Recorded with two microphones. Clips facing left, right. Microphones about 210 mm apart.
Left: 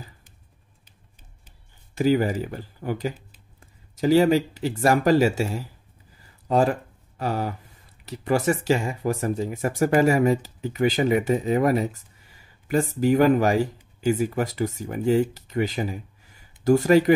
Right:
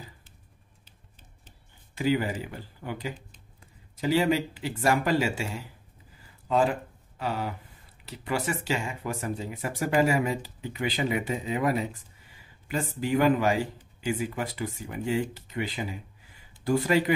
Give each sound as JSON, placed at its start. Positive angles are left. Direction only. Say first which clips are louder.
{"t": 2.0, "sound": "speech", "louder": "left 6 dB", "side_deg": 40}